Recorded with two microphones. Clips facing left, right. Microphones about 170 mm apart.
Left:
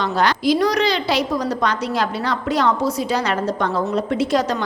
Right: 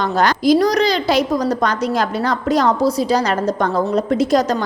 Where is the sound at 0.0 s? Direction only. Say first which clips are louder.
Right 3 dB; 45° right (ahead or behind).